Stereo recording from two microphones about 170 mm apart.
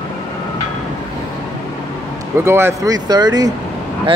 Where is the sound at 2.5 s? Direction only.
15° right (ahead or behind).